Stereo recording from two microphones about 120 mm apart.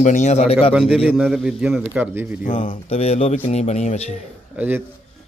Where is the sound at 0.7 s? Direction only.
10° right (ahead or behind).